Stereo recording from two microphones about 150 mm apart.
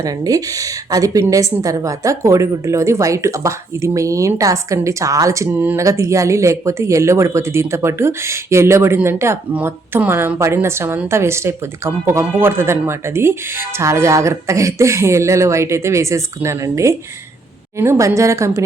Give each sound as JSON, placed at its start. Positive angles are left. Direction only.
{"t": 0.0, "sound": "a woman's voice", "side_deg": -25}